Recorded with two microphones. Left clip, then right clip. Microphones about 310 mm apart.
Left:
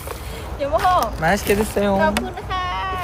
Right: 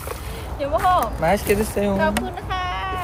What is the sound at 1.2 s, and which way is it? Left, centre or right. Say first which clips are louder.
Speech: left 1 dB; left.